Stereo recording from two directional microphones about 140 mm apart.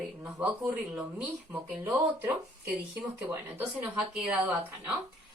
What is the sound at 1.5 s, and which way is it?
Speech, 25° right (ahead or behind).